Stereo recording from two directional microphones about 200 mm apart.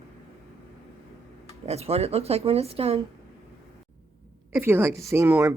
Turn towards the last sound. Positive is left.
turn(degrees=-15)  # may be behind; listen again after turning